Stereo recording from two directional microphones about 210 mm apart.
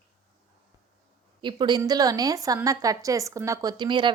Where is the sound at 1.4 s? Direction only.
20° right (ahead or behind).